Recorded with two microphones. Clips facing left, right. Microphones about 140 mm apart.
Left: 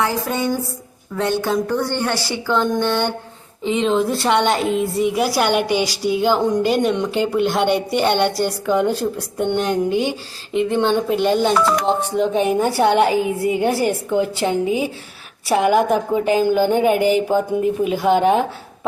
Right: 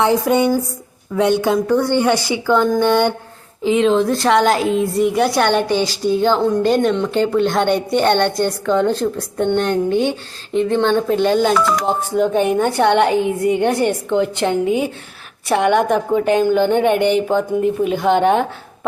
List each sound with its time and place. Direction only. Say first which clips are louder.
0.0 s speech: right 6 dB; 20° right (ahead or behind)
1.5 s a woman's voice: right 4 dB; 5° right (ahead or behind)
3.6 s a woman's voice: right 4 dB; centre (ahead or behind)